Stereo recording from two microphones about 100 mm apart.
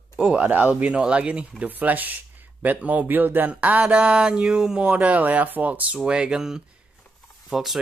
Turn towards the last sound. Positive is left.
turn(degrees=0)  # may be behind; listen again after turning